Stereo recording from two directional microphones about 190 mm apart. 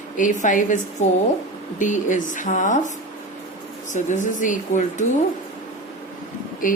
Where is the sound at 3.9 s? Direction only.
40° left (ahead or behind).